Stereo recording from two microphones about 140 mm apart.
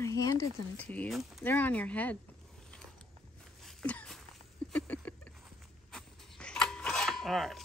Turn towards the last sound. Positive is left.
turn(degrees=0)  # may be behind; listen again after turning